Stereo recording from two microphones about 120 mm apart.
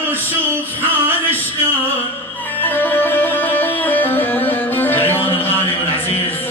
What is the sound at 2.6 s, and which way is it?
Music, 15° left (ahead or behind).